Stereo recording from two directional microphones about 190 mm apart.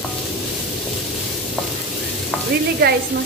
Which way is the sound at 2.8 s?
55° right (ahead or behind).